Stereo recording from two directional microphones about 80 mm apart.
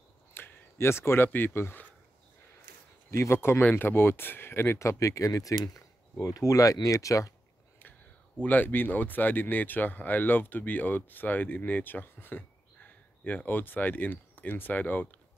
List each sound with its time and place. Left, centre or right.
0.3 s speech: left
3.1 s speech: left
8.4 s speech: left